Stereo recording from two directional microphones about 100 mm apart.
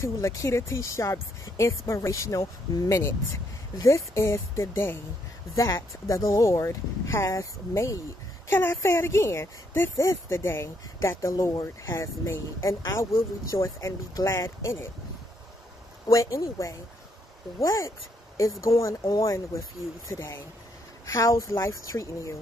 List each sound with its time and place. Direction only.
0.0 s speech: 30° left (ahead or behind)
16.1 s speech: 30° left (ahead or behind)